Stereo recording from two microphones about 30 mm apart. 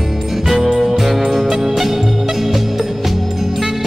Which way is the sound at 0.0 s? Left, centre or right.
Centre.